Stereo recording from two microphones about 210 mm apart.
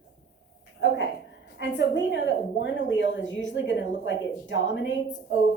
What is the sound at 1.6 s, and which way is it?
A woman's voice, 60° left (ahead or behind).